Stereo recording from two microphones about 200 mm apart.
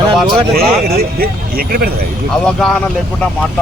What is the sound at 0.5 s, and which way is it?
Speech, 50° right (ahead or behind).